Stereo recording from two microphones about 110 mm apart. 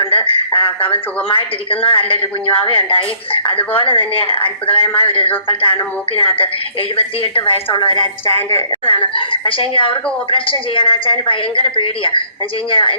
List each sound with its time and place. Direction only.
0.0 s a woman's voice: 55° left (ahead or behind)